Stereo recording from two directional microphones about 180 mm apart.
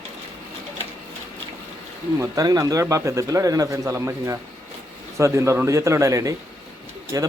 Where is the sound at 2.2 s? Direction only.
20° right (ahead or behind).